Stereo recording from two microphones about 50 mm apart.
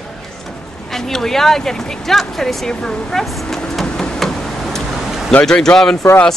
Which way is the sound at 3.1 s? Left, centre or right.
Centre.